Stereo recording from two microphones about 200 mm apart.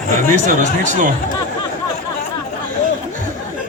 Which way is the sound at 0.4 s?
40° right (ahead or behind).